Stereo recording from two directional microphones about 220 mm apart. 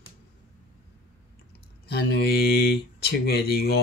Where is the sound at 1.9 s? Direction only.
50° left (ahead or behind).